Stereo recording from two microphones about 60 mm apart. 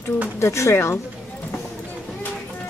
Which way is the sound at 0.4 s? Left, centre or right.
Left.